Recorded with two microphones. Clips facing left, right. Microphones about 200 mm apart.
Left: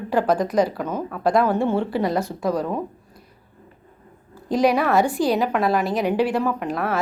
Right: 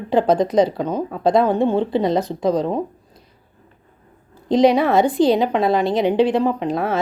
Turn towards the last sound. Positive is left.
turn(degrees=-25)  # may be behind; listen again after turning